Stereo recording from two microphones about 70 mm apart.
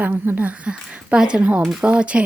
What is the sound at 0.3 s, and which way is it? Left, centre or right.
Speech, right.